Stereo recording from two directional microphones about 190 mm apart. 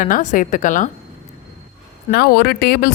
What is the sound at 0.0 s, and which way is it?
Speech, 40° left (ahead or behind).